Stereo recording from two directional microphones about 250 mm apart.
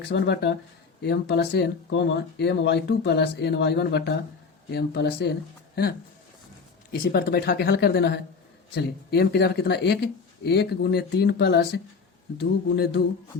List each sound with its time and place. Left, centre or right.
0.0 s speech: left
6.9 s speech: left